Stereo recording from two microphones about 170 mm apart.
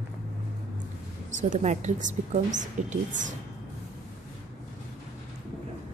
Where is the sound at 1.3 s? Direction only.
45° right (ahead or behind).